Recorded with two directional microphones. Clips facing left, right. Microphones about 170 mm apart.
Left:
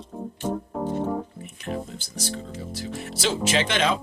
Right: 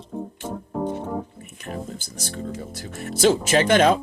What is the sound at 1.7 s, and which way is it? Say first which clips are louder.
Speech: left 1 dB; 50° right (ahead or behind).